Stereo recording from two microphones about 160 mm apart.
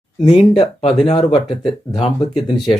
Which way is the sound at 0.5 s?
35° left (ahead or behind).